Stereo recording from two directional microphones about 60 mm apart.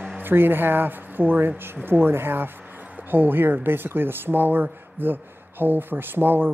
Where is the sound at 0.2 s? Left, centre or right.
Right.